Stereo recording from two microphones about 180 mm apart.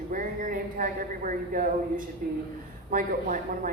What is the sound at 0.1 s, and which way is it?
A woman's voice, 50° right (ahead or behind).